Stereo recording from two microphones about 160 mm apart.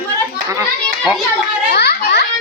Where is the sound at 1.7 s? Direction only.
90° left.